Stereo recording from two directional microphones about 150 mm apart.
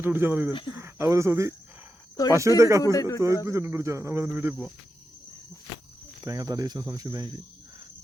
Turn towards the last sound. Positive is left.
turn(degrees=-25)  # may be behind; listen again after turning